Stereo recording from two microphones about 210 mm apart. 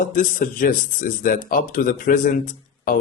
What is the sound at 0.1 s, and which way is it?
A man's voice, 40° left (ahead or behind).